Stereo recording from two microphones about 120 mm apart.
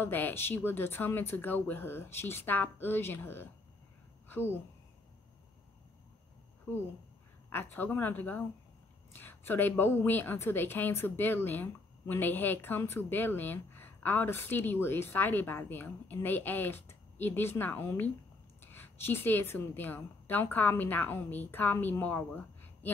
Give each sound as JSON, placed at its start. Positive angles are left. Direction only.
{"t": 0.0, "sound": "a woman's voice", "side_deg": 15}
{"t": 7.7, "sound": "a woman's voice", "side_deg": 15}